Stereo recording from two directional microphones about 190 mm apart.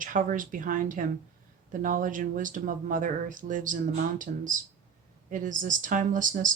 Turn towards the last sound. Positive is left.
turn(degrees=-45)  # may be behind; listen again after turning